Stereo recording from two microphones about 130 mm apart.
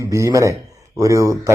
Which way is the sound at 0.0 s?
25° right (ahead or behind).